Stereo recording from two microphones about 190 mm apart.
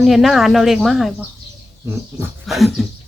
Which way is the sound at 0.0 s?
Centre (ahead or behind).